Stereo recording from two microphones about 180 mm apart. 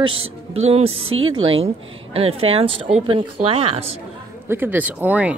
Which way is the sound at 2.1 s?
30° right (ahead or behind).